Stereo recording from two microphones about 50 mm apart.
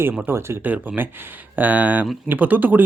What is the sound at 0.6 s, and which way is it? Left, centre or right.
Speech, right.